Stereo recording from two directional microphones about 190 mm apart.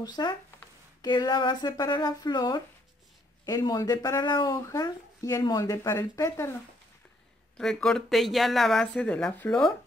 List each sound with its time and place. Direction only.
0.0 s speech: 20° left (ahead or behind)
7.5 s speech: 5° left (ahead or behind)